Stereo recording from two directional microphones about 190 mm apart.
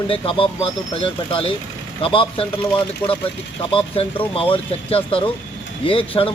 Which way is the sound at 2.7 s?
10° left (ahead or behind).